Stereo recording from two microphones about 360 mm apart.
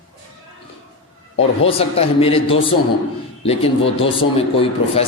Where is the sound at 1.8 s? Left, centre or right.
Centre.